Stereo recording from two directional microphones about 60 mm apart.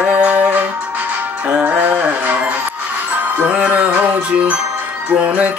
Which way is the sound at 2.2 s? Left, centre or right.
Right.